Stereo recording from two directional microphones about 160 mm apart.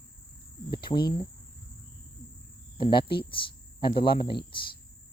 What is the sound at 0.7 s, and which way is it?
Speech, 30° left (ahead or behind).